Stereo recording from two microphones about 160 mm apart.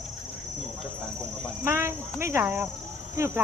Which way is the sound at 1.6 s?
15° right (ahead or behind).